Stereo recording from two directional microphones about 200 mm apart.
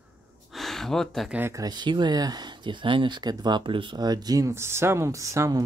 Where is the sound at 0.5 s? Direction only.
Centre (ahead or behind).